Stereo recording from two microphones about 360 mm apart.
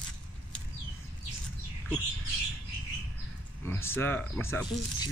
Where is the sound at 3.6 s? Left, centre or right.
Centre.